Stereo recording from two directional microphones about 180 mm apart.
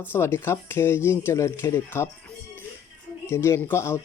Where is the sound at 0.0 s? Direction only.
10° left (ahead or behind).